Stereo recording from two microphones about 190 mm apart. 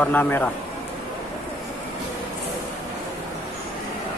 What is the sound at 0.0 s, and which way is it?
Speech, 10° left (ahead or behind).